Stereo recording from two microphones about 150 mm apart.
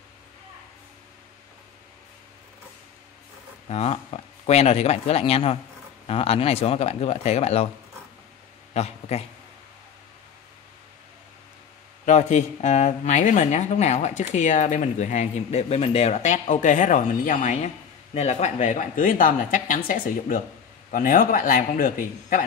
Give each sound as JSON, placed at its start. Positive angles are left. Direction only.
{"t": 3.6, "sound": "speech", "side_deg": 45}
{"t": 8.7, "sound": "speech", "side_deg": 45}
{"t": 12.1, "sound": "speech", "side_deg": 50}